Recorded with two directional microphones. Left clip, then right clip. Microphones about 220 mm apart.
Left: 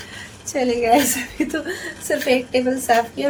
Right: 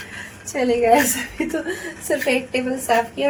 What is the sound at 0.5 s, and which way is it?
A woman's voice, 10° right (ahead or behind).